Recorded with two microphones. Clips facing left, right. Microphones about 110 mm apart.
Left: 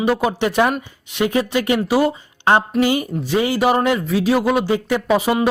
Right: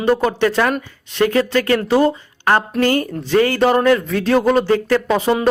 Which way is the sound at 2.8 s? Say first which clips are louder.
Right 1 dB; 10° left (ahead or behind).